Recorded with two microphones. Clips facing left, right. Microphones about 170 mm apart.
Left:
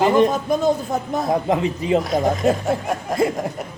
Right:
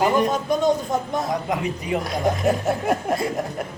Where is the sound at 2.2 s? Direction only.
Centre (ahead or behind).